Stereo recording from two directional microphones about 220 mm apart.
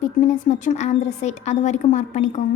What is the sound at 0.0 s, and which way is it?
A woman's voice, 35° left (ahead or behind).